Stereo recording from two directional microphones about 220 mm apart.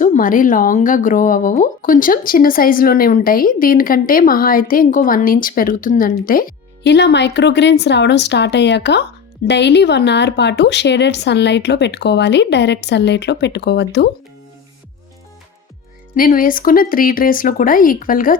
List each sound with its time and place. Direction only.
0.0 s speech: 35° left (ahead or behind)
16.1 s speech: 40° left (ahead or behind)